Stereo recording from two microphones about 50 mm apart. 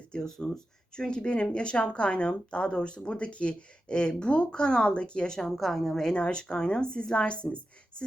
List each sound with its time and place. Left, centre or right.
0.1 s speech: centre
5.5 s a woman's voice: centre
6.1 s speech: centre